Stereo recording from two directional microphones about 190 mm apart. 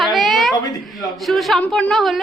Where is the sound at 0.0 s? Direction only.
Centre (ahead or behind).